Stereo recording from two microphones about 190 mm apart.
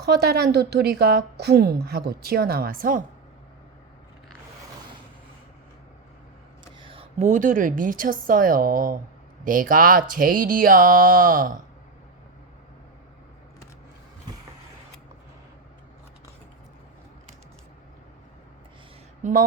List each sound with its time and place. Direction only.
0.0 s a woman's voice: 60° right (ahead or behind)
6.7 s a woman's voice: 25° right (ahead or behind); by 11.5 s 45° right (ahead or behind)
19.2 s speech: 45° right (ahead or behind)